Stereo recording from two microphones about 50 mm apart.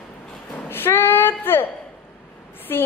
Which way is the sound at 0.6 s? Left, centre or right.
Left.